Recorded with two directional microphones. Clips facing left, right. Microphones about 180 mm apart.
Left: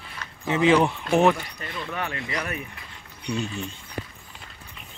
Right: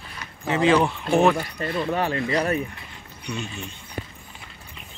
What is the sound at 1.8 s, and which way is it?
Speech, 35° right (ahead or behind).